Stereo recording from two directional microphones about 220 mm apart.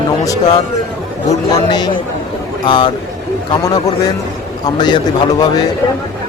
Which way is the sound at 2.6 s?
20° left (ahead or behind).